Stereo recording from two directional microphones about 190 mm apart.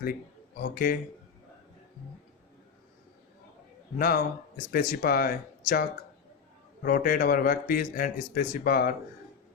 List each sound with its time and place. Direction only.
0.6 s speech: 50° left (ahead or behind)
3.9 s speech: 55° left (ahead or behind)
6.8 s speech: 45° left (ahead or behind)